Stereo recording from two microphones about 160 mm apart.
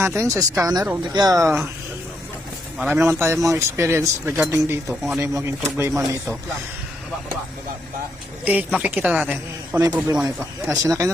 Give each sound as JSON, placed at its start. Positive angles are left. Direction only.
{"t": 0.0, "sound": "speech", "side_deg": -15}
{"t": 2.7, "sound": "speech", "side_deg": -10}
{"t": 5.9, "sound": "speech", "side_deg": 0}
{"t": 8.4, "sound": "speech", "side_deg": -10}